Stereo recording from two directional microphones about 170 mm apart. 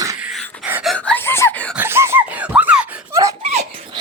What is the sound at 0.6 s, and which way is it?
Gasp, 5° right (ahead or behind).